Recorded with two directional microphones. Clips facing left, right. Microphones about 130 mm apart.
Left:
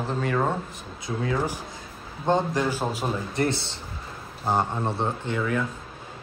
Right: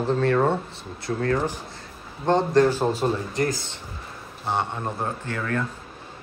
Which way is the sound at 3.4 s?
30° left (ahead or behind).